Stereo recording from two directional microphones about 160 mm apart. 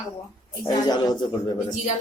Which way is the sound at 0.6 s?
25° left (ahead or behind).